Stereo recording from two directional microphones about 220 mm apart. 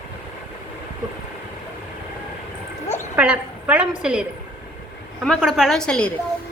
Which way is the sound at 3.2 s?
5° right (ahead or behind).